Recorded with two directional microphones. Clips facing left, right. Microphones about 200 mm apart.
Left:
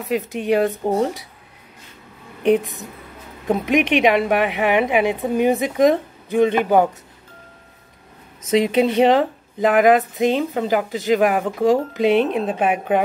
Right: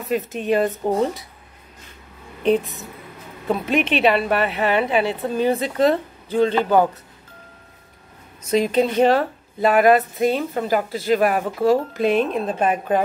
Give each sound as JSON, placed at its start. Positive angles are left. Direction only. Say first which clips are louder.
{"t": 0.1, "sound": "speech", "louder": "left 1 dB", "side_deg": 15}
{"t": 2.4, "sound": "speech", "louder": "left 2 dB", "side_deg": 15}
{"t": 8.6, "sound": "speech", "louder": "left 1 dB", "side_deg": 15}